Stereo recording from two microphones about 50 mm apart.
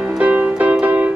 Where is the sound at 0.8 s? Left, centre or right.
Right.